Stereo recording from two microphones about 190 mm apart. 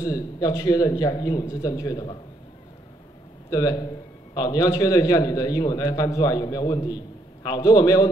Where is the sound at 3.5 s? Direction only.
20° left (ahead or behind).